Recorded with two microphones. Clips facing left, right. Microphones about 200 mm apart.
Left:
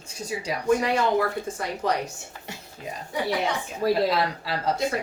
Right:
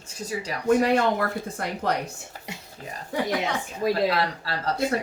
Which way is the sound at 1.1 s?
55° right (ahead or behind).